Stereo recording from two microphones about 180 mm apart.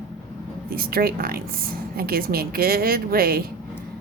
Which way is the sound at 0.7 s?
55° right (ahead or behind).